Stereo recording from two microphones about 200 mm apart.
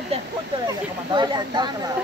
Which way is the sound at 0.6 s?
20° right (ahead or behind).